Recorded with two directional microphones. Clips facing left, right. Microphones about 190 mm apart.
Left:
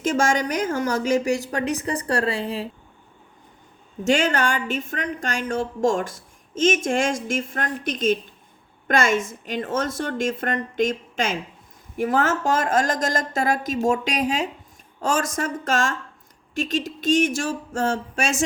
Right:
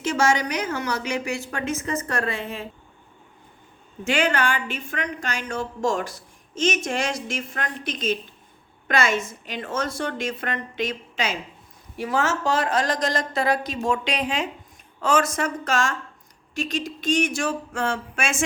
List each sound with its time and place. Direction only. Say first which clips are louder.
0.0 s a woman's voice: left 1 dB; 50° left (ahead or behind)
4.0 s a woman's voice: left 2 dB; 45° left (ahead or behind)